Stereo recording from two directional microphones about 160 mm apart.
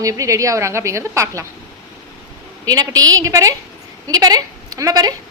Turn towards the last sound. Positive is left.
turn(degrees=-25)  # may be behind; listen again after turning